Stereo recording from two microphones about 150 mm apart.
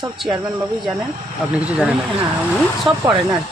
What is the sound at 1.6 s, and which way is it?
Speech, 5° right (ahead or behind).